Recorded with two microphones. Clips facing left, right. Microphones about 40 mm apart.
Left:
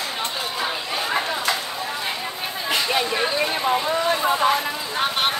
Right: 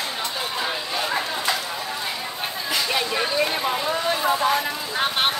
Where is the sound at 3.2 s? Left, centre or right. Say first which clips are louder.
Even; centre.